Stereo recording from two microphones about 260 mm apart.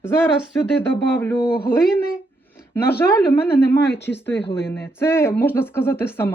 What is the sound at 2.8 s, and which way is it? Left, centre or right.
Speech, centre.